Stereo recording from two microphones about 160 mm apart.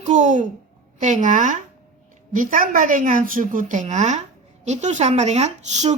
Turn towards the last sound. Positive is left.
turn(degrees=-45)  # may be behind; listen again after turning